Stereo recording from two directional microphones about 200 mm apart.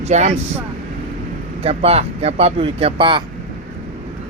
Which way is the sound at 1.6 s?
30° right (ahead or behind).